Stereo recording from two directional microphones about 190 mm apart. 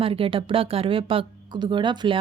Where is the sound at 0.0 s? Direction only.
30° right (ahead or behind).